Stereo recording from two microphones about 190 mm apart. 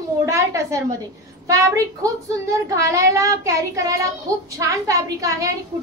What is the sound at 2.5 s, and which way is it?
Speech, 15° right (ahead or behind).